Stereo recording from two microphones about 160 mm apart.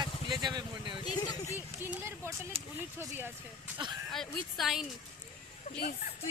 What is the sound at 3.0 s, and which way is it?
Speech, 15° right (ahead or behind).